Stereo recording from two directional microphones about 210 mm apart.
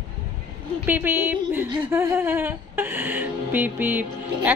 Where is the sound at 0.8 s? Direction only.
10° right (ahead or behind).